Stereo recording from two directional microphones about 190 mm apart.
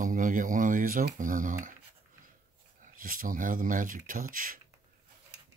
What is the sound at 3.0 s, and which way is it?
Speech, 45° right (ahead or behind).